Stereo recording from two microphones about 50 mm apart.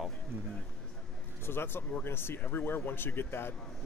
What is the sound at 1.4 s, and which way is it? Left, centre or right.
Speech, left.